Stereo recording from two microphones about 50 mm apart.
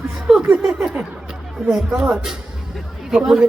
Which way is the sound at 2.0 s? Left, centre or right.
Right.